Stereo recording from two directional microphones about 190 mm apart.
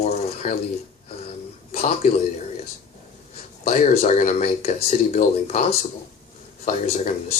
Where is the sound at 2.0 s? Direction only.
45° left (ahead or behind).